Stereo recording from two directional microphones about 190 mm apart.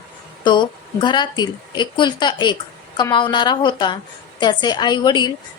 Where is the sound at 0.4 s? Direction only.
25° left (ahead or behind).